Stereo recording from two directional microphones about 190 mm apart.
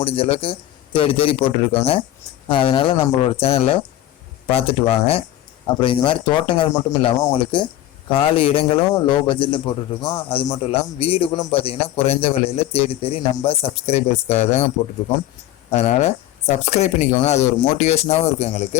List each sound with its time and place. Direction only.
0.0 s a man's voice: 30° left (ahead or behind)
15.7 s a man's voice: 35° left (ahead or behind)